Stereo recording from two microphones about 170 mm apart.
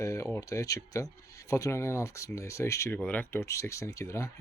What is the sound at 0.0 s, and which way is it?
Speech, 15° left (ahead or behind).